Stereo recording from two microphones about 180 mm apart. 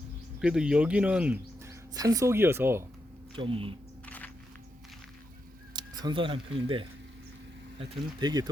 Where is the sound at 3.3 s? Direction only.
30° right (ahead or behind).